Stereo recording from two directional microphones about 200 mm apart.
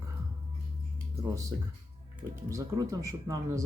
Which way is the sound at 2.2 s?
15° right (ahead or behind).